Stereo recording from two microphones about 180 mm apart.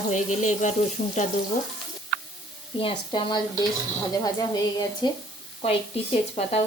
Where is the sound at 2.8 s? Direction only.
25° left (ahead or behind).